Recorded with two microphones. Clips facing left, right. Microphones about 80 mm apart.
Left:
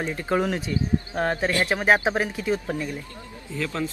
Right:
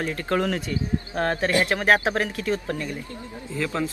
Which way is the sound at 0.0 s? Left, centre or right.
Centre.